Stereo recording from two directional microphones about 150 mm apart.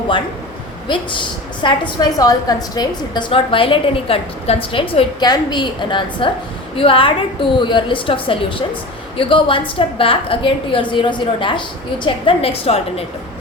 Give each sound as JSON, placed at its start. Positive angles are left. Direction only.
{"t": 0.9, "sound": "a woman's voice", "side_deg": 30}